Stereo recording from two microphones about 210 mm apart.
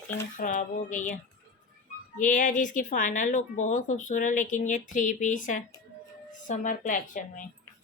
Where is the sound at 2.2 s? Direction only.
35° left (ahead or behind).